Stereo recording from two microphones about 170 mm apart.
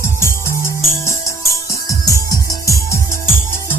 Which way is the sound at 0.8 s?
15° left (ahead or behind).